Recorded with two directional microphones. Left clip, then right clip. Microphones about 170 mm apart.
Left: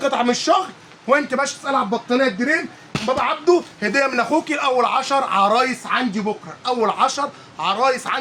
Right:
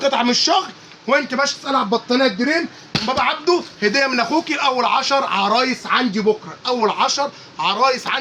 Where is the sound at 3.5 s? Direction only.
25° left (ahead or behind).